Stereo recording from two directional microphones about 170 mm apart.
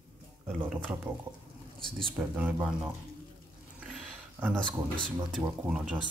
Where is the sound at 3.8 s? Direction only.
5° right (ahead or behind).